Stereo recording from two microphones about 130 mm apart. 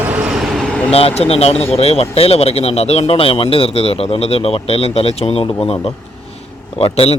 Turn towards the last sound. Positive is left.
turn(degrees=50)  # may be behind; listen again after turning